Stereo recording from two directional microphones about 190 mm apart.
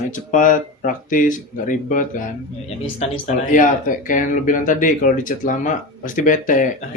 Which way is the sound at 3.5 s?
45° left (ahead or behind).